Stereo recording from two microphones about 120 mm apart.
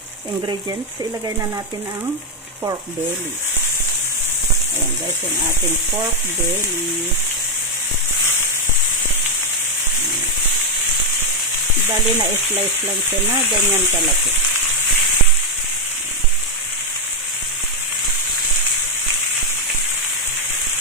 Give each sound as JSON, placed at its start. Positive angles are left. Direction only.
{"t": 11.8, "sound": "frying", "side_deg": -20}